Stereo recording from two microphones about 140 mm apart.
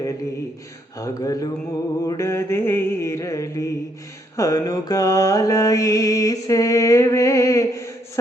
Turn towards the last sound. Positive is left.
turn(degrees=20)  # may be behind; listen again after turning